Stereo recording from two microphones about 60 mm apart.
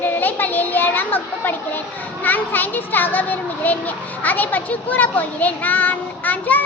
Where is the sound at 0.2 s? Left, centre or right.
Left.